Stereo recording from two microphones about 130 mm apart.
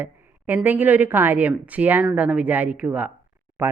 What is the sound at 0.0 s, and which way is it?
A woman's voice, 15° right (ahead or behind).